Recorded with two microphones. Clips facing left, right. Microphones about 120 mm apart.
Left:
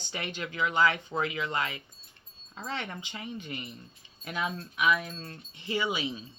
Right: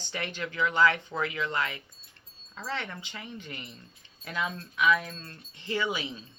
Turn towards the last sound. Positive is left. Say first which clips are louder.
# even
turn(degrees=15)  # may be behind; listen again after turning